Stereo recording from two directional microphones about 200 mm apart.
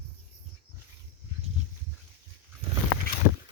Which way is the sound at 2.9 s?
50° left (ahead or behind).